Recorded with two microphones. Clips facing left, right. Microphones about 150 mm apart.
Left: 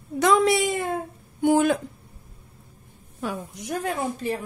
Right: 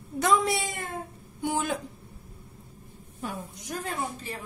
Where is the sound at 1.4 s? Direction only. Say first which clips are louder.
Left 10 dB; 60° left (ahead or behind).